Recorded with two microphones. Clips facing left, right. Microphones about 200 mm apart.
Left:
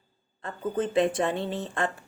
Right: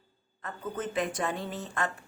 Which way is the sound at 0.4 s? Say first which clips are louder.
Left 6 dB; 30° left (ahead or behind).